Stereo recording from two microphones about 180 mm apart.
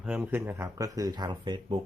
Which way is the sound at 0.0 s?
10° right (ahead or behind).